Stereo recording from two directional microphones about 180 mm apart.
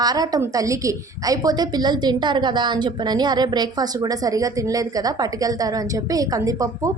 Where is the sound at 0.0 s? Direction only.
20° right (ahead or behind).